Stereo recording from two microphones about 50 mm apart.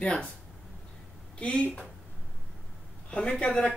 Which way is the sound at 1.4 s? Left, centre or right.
Left.